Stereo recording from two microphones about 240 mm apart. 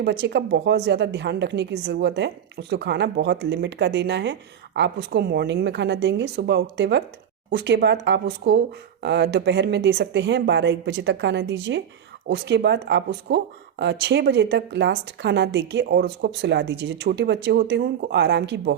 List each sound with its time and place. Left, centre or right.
0.0 s a woman's voice: right